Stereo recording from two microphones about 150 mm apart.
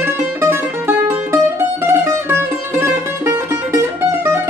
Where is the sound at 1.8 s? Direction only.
15° right (ahead or behind).